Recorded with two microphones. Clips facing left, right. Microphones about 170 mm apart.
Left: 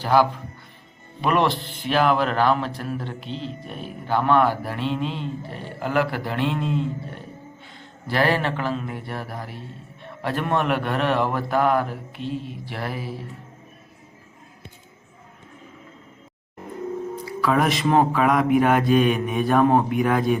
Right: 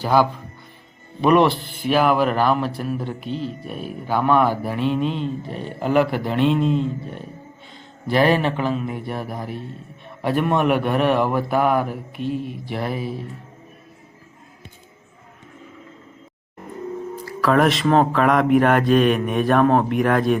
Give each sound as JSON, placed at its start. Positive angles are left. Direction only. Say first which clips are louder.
{"t": 0.0, "sound": "speech", "louder": "right 1 dB", "side_deg": -15}
{"t": 8.0, "sound": "speech", "louder": "right 4 dB", "side_deg": -15}
{"t": 17.2, "sound": "music", "louder": "right 4 dB", "side_deg": 0}
{"t": 18.1, "sound": "mantra", "louder": "right 2 dB", "side_deg": 5}